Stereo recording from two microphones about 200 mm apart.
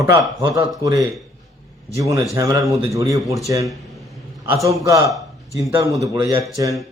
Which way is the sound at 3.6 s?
Centre (ahead or behind).